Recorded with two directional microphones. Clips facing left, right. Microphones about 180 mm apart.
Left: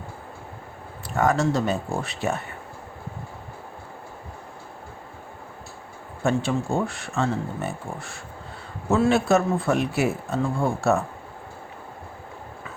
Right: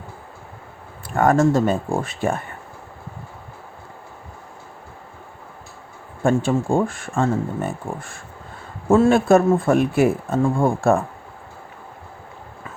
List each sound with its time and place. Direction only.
1.1 s speech: 50° right (ahead or behind)
6.2 s speech: 50° right (ahead or behind)